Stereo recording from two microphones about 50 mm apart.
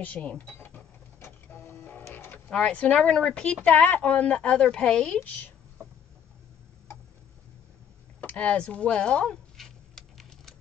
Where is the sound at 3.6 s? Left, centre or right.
Left.